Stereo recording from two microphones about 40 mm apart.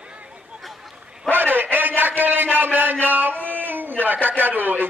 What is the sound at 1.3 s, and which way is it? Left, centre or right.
A man's voice, right.